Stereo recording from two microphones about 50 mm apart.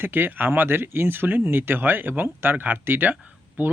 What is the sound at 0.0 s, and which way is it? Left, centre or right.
Speech, right.